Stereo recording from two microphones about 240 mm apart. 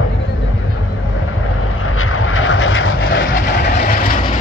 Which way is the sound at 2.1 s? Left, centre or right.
Left.